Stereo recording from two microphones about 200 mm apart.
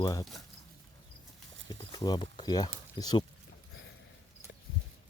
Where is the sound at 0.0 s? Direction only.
20° left (ahead or behind).